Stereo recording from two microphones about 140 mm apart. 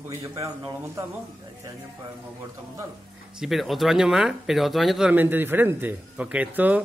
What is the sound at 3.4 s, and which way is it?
Speech, centre (ahead or behind).